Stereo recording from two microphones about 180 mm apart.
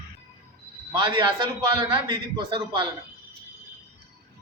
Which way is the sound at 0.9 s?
25° right (ahead or behind).